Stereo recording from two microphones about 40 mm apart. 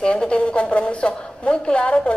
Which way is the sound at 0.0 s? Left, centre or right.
Left.